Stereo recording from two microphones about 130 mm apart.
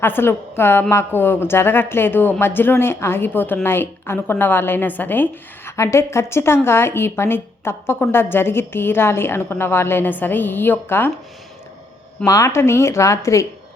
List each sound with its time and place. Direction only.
0.0 s a woman's voice: 15° left (ahead or behind)
12.2 s speech: 25° left (ahead or behind)